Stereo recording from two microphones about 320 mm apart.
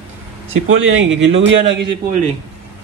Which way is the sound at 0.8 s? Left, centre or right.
Right.